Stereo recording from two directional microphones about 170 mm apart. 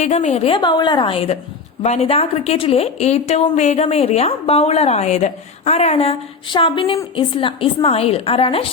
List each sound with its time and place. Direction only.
0.0 s a woman's voice: 40° left (ahead or behind)